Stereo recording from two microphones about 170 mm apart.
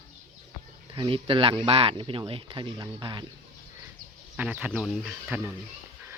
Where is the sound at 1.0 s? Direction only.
30° right (ahead or behind).